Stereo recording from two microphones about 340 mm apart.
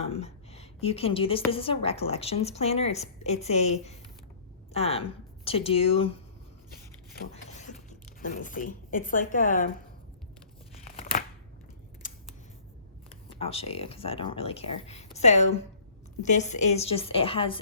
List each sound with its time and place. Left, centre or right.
0.0 s a woman's voice: centre
7.5 s speech: left
10.8 s a sound: left
13.1 s a woman's voice: centre